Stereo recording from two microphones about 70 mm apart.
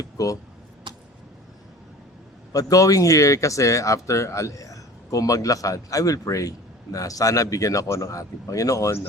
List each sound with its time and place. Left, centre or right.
0.0 s speech: left
0.9 s a sound: right
2.5 s speech: left